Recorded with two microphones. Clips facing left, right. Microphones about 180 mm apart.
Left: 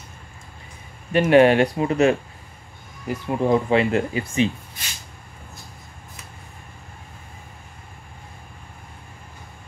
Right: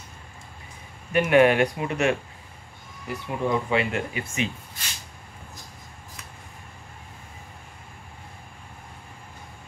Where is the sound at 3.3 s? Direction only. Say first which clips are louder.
Left 6 dB; 35° left (ahead or behind).